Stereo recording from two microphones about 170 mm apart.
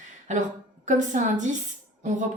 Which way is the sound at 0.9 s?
45° right (ahead or behind).